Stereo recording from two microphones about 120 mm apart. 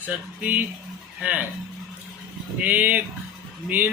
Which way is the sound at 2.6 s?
15° right (ahead or behind).